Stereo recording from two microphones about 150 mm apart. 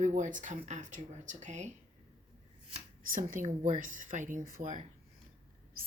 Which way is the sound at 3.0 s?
65° right (ahead or behind).